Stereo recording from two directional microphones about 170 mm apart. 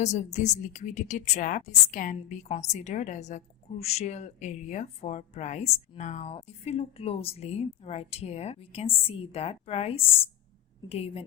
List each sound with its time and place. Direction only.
0.0 s a woman's voice: 40° left (ahead or behind)